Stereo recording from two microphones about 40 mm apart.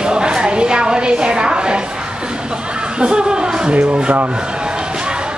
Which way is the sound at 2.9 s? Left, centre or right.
Right.